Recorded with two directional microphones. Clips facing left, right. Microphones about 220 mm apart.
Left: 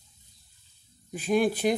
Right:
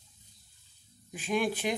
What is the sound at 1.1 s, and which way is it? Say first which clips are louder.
Speech: left 6 dB; 40° left (ahead or behind).